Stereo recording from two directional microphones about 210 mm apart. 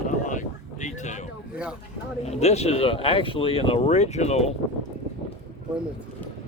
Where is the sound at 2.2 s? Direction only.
30° left (ahead or behind).